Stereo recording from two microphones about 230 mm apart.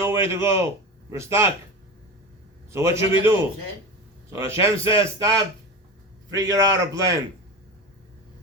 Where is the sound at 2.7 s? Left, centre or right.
Centre.